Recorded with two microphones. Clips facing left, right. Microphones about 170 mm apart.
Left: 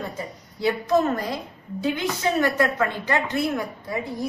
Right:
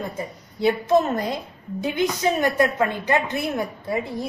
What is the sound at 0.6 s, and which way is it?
A woman's voice, 20° right (ahead or behind).